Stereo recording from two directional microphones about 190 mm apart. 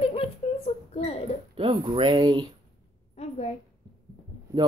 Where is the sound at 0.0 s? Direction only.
30° left (ahead or behind).